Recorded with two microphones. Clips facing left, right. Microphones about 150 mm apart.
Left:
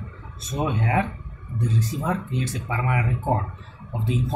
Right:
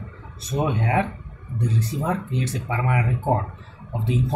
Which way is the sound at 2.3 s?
30° right (ahead or behind).